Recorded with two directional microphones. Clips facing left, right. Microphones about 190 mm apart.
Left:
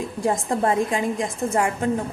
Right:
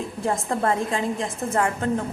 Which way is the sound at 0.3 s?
15° left (ahead or behind).